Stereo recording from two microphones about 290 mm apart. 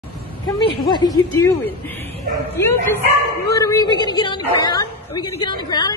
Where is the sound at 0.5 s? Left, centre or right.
Centre.